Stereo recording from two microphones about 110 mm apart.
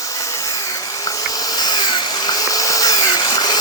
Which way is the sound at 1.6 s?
40° left (ahead or behind).